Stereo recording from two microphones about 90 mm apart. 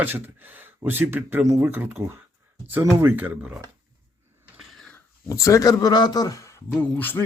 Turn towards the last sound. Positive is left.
turn(degrees=20)  # may be behind; listen again after turning